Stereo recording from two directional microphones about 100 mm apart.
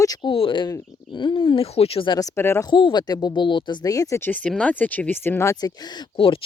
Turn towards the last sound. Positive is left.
turn(degrees=60)  # may be behind; listen again after turning